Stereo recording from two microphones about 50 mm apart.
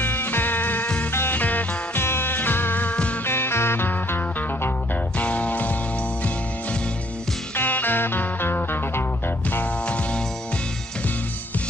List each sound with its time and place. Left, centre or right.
0.0 s music: left
2.0 s music: left
2.8 s music: left
3.3 s music: left
5.2 s music: left
7.5 s music: left